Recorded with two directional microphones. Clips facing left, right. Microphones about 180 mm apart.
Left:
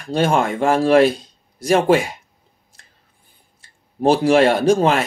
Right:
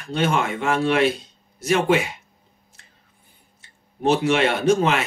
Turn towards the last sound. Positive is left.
turn(degrees=35)  # may be behind; listen again after turning